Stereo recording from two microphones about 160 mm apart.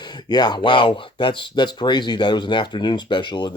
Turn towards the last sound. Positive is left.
turn(degrees=30)  # may be behind; listen again after turning